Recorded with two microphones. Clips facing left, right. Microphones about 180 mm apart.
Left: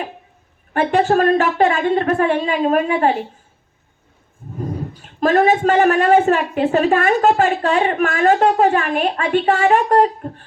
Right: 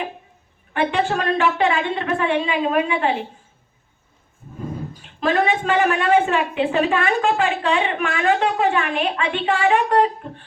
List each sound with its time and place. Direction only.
0.7 s a woman's voice: 45° left (ahead or behind)
4.6 s a woman's voice: 45° left (ahead or behind)